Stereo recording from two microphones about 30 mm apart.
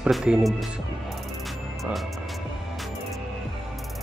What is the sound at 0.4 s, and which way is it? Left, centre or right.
Speech, centre.